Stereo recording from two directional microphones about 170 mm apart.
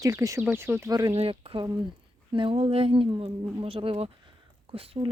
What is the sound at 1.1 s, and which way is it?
Speech, 35° right (ahead or behind).